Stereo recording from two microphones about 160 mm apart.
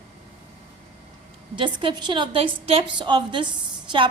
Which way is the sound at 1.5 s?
30° right (ahead or behind).